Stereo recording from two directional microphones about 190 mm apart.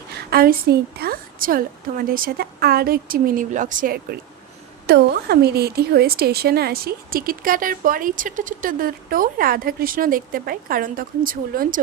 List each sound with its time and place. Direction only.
0.1 s a woman's voice: 55° right (ahead or behind)